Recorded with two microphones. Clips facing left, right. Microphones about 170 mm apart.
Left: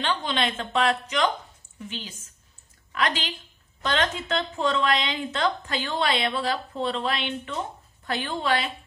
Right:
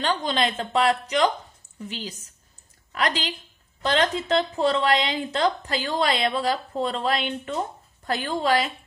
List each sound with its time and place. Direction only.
0.0 s a woman's voice: 40° right (ahead or behind)